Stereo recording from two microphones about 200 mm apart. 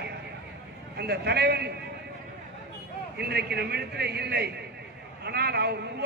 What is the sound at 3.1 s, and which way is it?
A man's voice, 55° right (ahead or behind).